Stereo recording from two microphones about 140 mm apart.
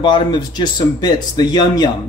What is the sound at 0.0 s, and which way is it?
Speech, 30° left (ahead or behind).